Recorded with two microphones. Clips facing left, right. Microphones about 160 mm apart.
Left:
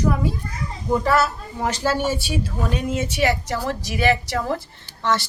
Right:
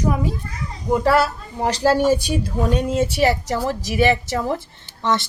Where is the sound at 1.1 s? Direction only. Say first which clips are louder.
Right 2 dB; 35° right (ahead or behind).